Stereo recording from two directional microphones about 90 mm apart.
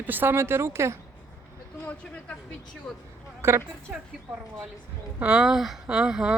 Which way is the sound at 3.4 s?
30° right (ahead or behind).